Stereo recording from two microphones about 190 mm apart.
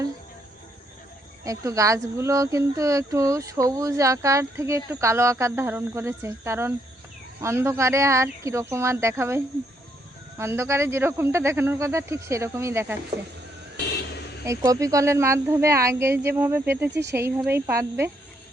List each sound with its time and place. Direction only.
1.5 s speech: 15° right (ahead or behind)
14.4 s speech: 15° right (ahead or behind)
16.9 s speech: 65° right (ahead or behind)
17.2 s speech: 10° right (ahead or behind)